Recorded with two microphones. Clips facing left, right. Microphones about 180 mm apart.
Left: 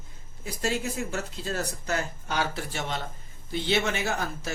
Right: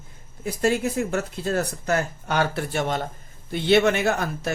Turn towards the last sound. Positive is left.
turn(degrees=-60)  # may be behind; listen again after turning